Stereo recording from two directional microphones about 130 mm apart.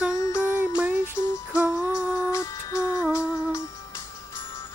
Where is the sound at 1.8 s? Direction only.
20° left (ahead or behind).